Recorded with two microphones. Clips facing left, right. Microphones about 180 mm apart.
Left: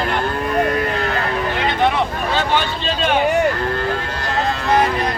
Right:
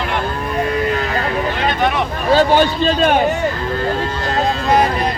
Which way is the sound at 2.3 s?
40° right (ahead or behind).